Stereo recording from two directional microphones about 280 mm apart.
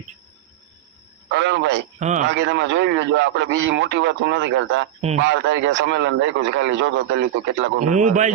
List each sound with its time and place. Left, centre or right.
1.3 s speech: right
2.0 s a man's voice: right
2.3 s a man's voice: right
4.9 s a man's voice: right
5.2 s a man's voice: right
7.9 s a man's voice: right